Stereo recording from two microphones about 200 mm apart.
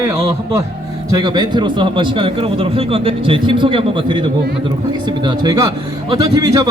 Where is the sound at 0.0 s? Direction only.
15° right (ahead or behind).